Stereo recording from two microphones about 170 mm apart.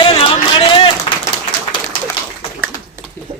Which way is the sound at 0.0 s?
30° left (ahead or behind).